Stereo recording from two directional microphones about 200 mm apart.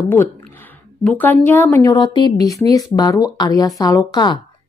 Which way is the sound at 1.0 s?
10° left (ahead or behind).